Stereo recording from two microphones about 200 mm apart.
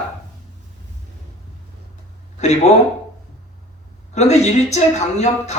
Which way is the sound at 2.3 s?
35° left (ahead or behind).